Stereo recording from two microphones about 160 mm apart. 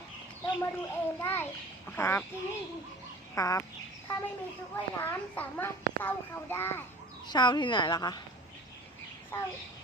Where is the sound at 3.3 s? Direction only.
20° left (ahead or behind).